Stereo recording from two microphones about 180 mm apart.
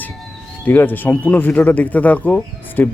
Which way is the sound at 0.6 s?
10° left (ahead or behind).